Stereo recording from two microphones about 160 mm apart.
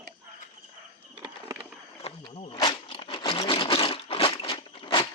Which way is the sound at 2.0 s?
40° left (ahead or behind).